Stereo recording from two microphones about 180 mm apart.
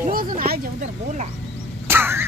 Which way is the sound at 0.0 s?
50° right (ahead or behind).